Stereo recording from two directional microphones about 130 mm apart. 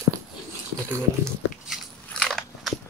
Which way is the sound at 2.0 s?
5° left (ahead or behind).